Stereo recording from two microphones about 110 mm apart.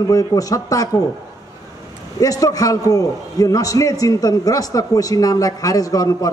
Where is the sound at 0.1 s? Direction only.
35° left (ahead or behind).